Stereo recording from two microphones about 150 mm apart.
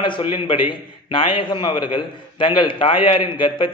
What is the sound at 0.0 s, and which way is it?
A man's voice, 35° left (ahead or behind).